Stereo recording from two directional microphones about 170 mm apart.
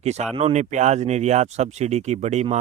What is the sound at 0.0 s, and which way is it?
Speech, 40° right (ahead or behind).